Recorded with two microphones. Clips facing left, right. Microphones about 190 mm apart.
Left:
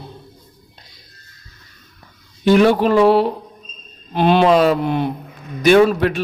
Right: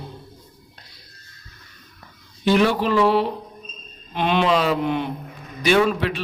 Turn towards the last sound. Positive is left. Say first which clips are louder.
# left 6 dB
turn(degrees=50)  # may be behind; listen again after turning